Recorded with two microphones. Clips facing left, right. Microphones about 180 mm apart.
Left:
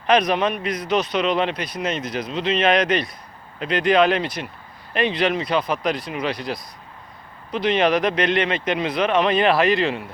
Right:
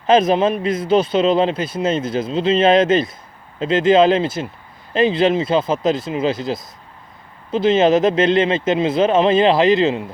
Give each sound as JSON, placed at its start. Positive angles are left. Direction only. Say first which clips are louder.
{"t": 0.1, "sound": "a man's voice", "louder": "right 5 dB", "side_deg": -25}